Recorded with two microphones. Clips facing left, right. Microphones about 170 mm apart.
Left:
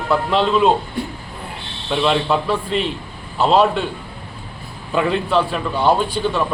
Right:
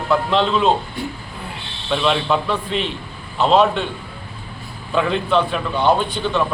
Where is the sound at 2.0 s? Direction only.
5° left (ahead or behind).